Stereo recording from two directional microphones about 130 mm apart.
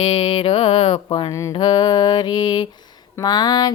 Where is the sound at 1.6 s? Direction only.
35° left (ahead or behind).